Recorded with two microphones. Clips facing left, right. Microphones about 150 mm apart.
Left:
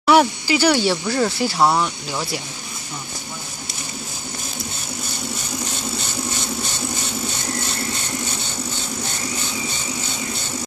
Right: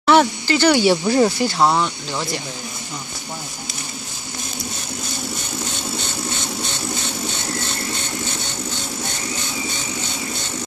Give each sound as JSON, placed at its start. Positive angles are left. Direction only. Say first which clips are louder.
{"t": 0.0, "sound": "a sound", "louder": "even", "side_deg": 5}
{"t": 1.0, "sound": "speech", "louder": "right 5 dB", "side_deg": -20}
{"t": 1.4, "sound": "speech", "louder": "right 1 dB", "side_deg": 5}